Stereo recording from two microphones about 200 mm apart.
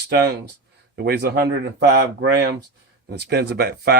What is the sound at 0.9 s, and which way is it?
Speech, 55° right (ahead or behind).